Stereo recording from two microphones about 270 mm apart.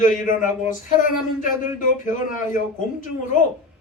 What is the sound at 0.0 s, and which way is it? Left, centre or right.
Speech, left.